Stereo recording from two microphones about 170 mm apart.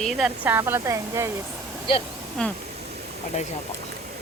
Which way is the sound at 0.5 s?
15° right (ahead or behind).